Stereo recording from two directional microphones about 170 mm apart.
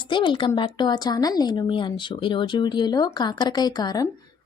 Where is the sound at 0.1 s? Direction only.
30° left (ahead or behind).